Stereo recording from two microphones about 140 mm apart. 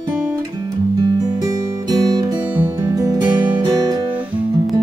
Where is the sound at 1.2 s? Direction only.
25° right (ahead or behind).